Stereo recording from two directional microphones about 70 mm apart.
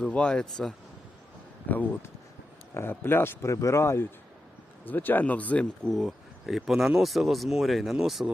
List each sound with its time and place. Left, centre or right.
0.0 s speech: centre
1.6 s a man's voice: left
4.9 s speech: left
5.9 s speech: centre